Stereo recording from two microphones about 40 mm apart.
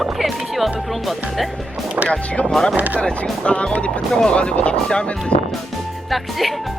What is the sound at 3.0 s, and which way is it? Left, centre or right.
Speech, left.